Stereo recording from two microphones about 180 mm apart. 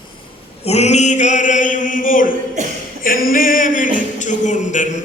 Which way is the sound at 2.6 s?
40° right (ahead or behind).